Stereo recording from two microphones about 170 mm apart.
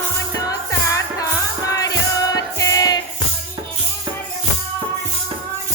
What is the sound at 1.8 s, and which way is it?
Music, 20° left (ahead or behind).